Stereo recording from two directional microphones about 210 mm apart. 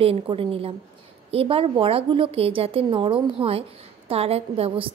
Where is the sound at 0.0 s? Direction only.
25° right (ahead or behind).